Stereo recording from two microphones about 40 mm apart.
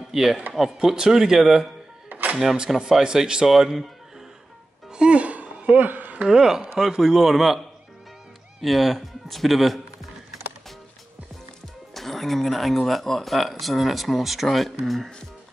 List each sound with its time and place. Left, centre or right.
0.1 s speech: centre
2.0 s a sound: right
2.9 s speech: centre
3.4 s speech: centre
4.9 s a sound: right
6.3 s speech: centre
8.5 s speech: centre
11.9 s speech: centre